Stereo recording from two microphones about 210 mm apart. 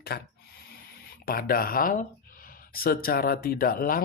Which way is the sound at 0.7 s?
45° left (ahead or behind).